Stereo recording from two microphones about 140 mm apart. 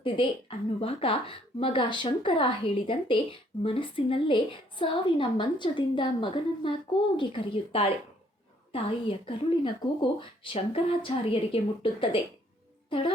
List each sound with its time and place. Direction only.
0.0 s a woman's voice: 40° left (ahead or behind)